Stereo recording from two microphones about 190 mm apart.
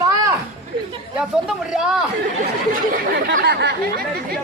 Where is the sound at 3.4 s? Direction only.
60° right (ahead or behind).